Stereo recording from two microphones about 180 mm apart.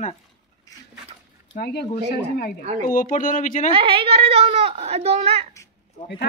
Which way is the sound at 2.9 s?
50° left (ahead or behind).